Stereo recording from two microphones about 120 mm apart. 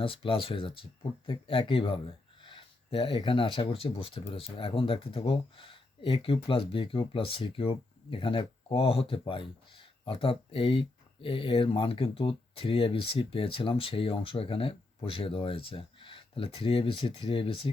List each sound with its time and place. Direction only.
0.0 s speech: 45° left (ahead or behind)